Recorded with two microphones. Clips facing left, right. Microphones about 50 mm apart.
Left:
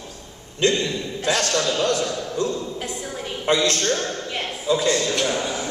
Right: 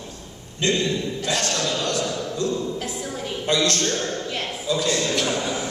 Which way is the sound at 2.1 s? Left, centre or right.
Centre.